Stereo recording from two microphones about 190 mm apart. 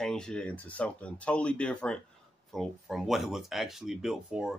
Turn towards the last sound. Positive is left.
turn(degrees=0)  # may be behind; listen again after turning